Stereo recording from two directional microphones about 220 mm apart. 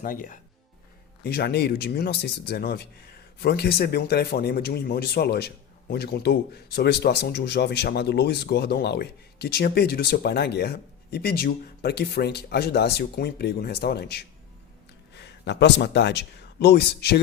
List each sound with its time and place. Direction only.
0.0 s speech: 40° left (ahead or behind)